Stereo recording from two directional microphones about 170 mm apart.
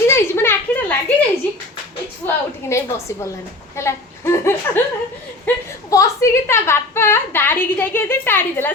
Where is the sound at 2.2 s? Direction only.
15° left (ahead or behind).